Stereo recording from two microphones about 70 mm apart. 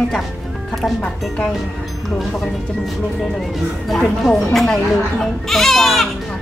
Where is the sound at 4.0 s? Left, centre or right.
Centre.